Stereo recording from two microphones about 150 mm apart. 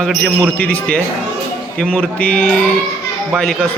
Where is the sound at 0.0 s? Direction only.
Centre (ahead or behind).